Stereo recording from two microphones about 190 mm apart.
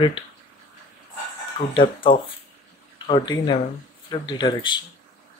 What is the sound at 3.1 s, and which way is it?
Speech, 25° left (ahead or behind).